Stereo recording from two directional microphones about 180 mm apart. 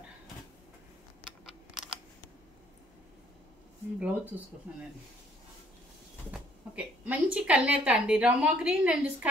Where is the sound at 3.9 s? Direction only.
10° right (ahead or behind).